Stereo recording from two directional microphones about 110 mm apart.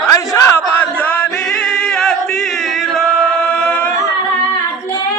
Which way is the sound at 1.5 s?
5° left (ahead or behind).